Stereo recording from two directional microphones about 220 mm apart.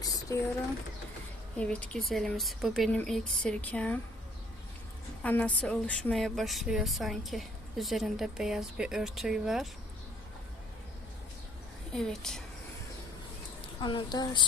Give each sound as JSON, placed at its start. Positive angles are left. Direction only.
{"t": 0.0, "sound": "a sound", "side_deg": 15}
{"t": 1.5, "sound": "a woman's voice", "side_deg": 5}
{"t": 5.2, "sound": "a woman's voice", "side_deg": 5}
{"t": 11.9, "sound": "a woman's voice", "side_deg": 5}
{"t": 13.8, "sound": "a woman's voice", "side_deg": 20}